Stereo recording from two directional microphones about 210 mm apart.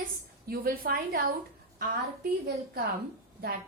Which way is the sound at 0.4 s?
45° right (ahead or behind).